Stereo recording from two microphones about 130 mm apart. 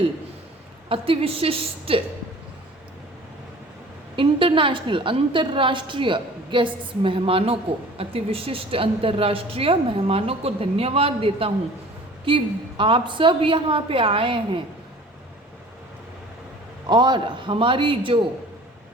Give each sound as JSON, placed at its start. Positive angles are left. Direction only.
{"t": 0.9, "sound": "a woman's voice", "side_deg": -45}
{"t": 4.1, "sound": "a woman's voice", "side_deg": -40}
{"t": 16.9, "sound": "a woman's voice", "side_deg": -35}